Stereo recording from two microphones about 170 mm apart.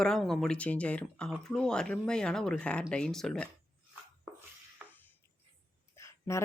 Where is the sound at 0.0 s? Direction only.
5° left (ahead or behind).